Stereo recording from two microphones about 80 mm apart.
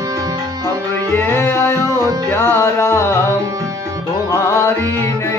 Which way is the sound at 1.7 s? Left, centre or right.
Right.